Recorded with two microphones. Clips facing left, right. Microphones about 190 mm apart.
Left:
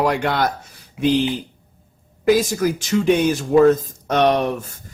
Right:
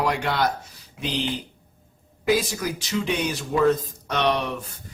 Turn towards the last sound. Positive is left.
turn(degrees=45)  # may be behind; listen again after turning